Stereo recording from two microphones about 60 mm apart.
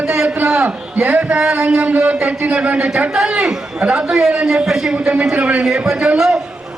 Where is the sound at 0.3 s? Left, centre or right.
Right.